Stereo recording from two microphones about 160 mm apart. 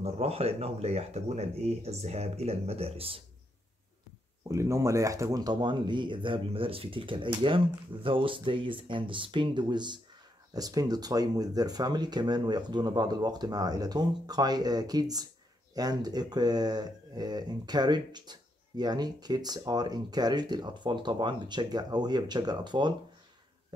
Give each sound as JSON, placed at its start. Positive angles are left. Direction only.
{"t": 0.0, "sound": "speech", "side_deg": -40}
{"t": 4.5, "sound": "speech", "side_deg": -20}